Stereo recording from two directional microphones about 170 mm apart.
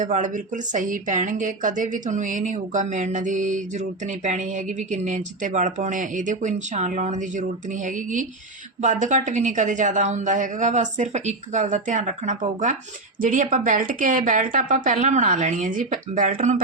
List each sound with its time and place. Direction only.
0.0 s a woman's voice: 50° right (ahead or behind)